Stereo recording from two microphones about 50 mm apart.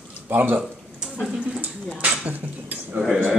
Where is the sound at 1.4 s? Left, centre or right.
Right.